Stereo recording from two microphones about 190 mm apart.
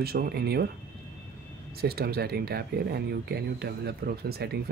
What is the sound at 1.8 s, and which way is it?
Speech, 55° right (ahead or behind).